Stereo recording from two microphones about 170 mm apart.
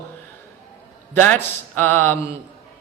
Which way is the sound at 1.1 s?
10° left (ahead or behind).